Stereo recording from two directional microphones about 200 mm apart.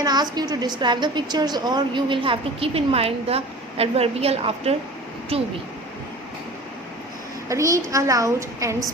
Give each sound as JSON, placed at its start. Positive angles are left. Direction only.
{"t": 0.0, "sound": "a woman's voice", "side_deg": -20}
{"t": 7.4, "sound": "a woman's voice", "side_deg": -15}